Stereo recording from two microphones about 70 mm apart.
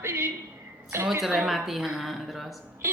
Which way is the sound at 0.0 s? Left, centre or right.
Right.